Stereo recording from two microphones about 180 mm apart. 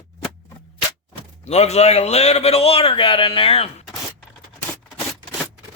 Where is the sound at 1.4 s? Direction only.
35° left (ahead or behind).